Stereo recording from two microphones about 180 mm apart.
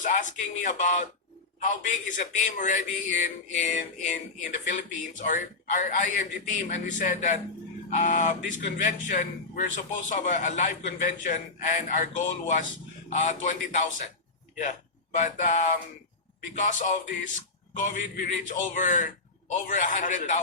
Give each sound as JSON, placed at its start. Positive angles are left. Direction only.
{"t": 0.0, "sound": "speech", "side_deg": 45}
{"t": 15.1, "sound": "speech", "side_deg": 45}